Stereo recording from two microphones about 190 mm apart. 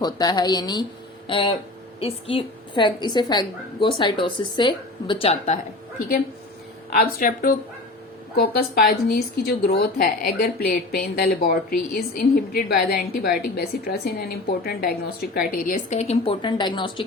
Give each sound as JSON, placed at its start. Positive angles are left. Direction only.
{"t": 0.0, "sound": "a woman's voice", "side_deg": 20}
{"t": 6.9, "sound": "a woman's voice", "side_deg": 50}